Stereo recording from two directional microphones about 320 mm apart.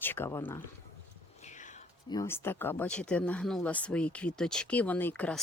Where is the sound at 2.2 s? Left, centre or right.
Centre.